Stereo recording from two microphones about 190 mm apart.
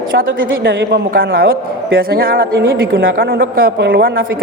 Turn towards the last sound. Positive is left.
turn(degrees=-50)  # may be behind; listen again after turning